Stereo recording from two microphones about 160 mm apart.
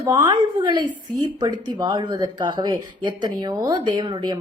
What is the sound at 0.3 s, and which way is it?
Speech, 30° right (ahead or behind).